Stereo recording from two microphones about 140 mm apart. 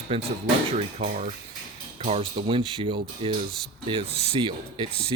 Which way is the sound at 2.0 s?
45° right (ahead or behind).